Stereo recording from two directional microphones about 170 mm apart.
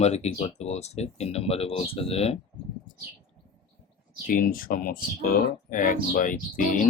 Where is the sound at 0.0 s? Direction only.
40° left (ahead or behind).